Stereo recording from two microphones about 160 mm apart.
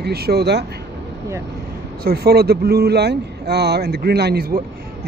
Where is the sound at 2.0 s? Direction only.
75° right (ahead or behind).